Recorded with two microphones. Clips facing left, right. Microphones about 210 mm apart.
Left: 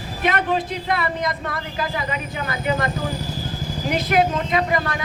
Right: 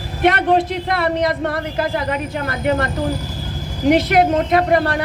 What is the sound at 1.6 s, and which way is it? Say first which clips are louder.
A man's voice: right 6 dB; 55° right (ahead or behind).